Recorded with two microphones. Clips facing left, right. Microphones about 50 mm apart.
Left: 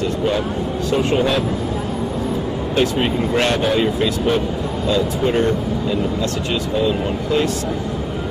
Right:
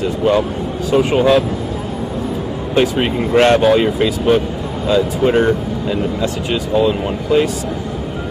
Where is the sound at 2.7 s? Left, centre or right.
Centre.